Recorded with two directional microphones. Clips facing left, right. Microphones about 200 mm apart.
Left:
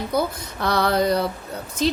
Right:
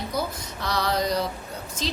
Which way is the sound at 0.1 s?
60° left (ahead or behind).